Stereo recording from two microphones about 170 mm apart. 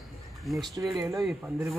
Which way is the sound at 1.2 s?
5° right (ahead or behind).